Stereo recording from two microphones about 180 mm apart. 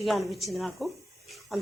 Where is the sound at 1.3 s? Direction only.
Centre (ahead or behind).